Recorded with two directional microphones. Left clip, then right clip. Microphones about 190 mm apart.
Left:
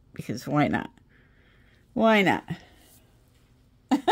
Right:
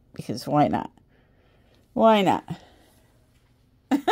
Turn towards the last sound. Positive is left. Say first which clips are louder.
# even
turn(degrees=-15)  # may be behind; listen again after turning